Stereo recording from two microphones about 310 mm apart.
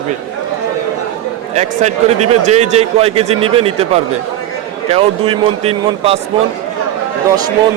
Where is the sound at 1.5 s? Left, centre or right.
Right.